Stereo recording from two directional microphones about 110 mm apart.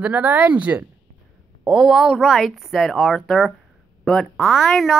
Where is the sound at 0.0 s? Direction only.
15° right (ahead or behind).